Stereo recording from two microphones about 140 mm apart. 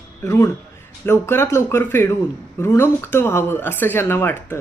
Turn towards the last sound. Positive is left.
turn(degrees=15)  # may be behind; listen again after turning